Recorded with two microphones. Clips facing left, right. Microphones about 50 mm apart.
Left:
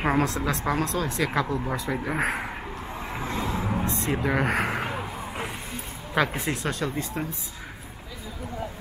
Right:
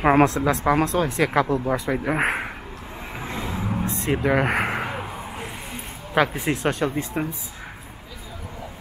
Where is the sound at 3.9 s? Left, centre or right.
Right.